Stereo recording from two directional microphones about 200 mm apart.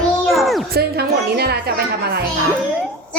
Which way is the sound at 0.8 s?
55° right (ahead or behind).